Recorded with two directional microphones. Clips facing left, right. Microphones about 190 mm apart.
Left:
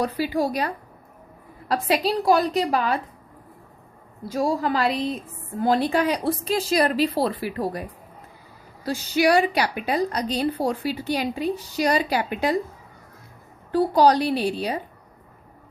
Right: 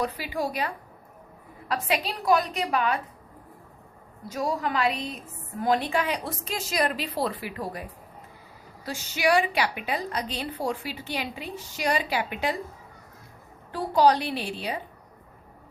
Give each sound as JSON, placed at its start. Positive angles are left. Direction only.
{"t": 0.0, "sound": "a woman's voice", "side_deg": 35}
{"t": 4.3, "sound": "a woman's voice", "side_deg": 30}
{"t": 13.7, "sound": "a woman's voice", "side_deg": 35}